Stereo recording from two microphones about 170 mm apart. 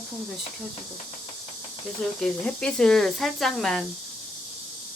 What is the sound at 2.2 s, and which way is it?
Speech, 5° left (ahead or behind).